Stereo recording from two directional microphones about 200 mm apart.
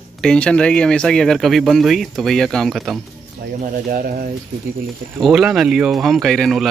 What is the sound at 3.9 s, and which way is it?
Speech, 45° right (ahead or behind).